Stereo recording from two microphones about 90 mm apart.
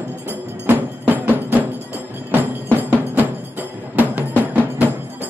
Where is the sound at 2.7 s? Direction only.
20° right (ahead or behind).